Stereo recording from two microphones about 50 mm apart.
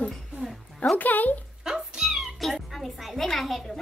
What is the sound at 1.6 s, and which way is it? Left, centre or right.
Cat, centre.